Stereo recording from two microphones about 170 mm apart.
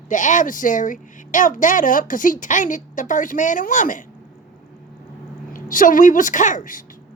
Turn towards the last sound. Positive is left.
turn(degrees=50)  # may be behind; listen again after turning